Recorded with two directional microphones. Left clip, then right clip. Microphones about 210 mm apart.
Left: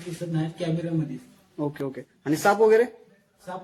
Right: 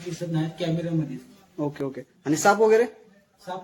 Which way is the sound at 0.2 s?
Centre (ahead or behind).